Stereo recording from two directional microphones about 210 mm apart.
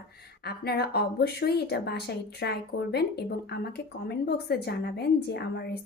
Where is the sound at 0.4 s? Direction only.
50° left (ahead or behind).